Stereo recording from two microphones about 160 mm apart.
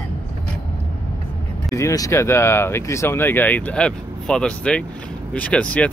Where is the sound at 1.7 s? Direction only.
20° left (ahead or behind).